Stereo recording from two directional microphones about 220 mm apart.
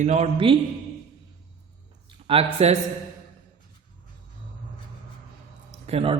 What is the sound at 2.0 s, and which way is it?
Speech, 25° right (ahead or behind).